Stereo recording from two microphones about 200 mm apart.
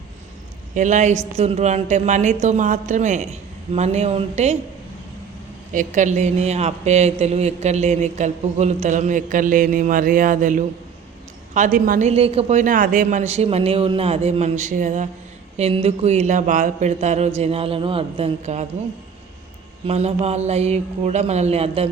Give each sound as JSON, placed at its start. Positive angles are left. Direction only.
{"t": 0.7, "sound": "speech", "side_deg": -40}
{"t": 5.7, "sound": "speech", "side_deg": -40}
{"t": 19.9, "sound": "speech", "side_deg": -30}